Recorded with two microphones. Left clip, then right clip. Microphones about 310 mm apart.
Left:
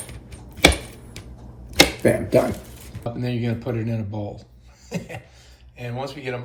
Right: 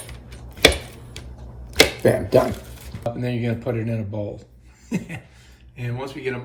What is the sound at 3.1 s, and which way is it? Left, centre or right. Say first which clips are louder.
Speech: left 1 dB; centre.